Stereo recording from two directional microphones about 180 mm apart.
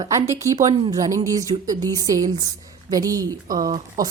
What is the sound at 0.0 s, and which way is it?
A woman's voice, 15° right (ahead or behind).